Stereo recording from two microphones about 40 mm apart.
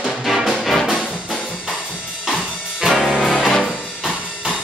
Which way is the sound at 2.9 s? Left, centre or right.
Centre.